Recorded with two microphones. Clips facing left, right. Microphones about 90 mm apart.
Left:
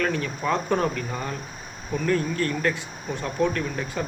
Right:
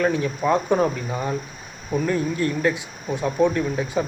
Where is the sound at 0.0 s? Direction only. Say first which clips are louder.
Right 4 dB; 15° right (ahead or behind).